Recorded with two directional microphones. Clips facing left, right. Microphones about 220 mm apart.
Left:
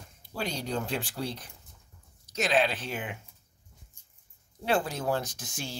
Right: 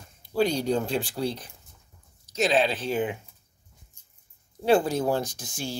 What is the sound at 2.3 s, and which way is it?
Speech, 35° right (ahead or behind).